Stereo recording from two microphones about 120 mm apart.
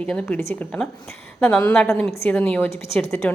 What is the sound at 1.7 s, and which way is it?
A woman's voice, 5° left (ahead or behind).